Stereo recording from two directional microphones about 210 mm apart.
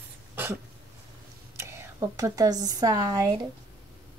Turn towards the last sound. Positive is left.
turn(degrees=-15)  # may be behind; listen again after turning